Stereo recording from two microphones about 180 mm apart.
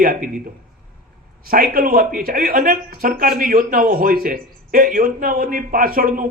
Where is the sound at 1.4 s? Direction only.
55° right (ahead or behind).